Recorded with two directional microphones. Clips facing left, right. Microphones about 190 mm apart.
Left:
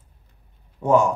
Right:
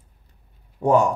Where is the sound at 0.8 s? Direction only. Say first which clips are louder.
Even; 30° right (ahead or behind).